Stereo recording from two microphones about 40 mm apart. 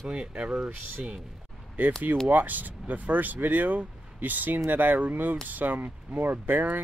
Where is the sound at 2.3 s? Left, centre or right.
Right.